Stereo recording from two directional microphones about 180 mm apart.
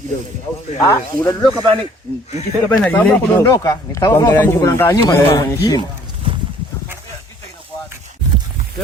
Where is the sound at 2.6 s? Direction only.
10° left (ahead or behind).